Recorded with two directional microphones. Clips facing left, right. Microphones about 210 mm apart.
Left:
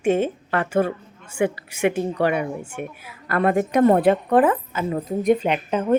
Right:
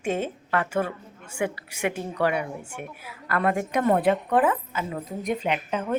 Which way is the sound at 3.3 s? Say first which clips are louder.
Left 5 dB; 30° left (ahead or behind).